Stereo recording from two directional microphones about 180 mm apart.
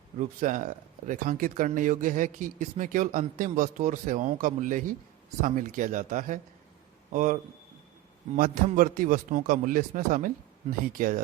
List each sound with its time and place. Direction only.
0.2 s a man's voice: 45° right (ahead or behind)
8.4 s speech: 45° right (ahead or behind)